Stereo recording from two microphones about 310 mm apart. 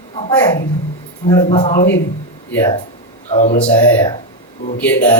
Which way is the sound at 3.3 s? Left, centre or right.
Left.